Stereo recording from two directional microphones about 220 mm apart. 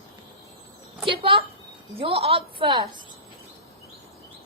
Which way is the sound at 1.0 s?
25° right (ahead or behind).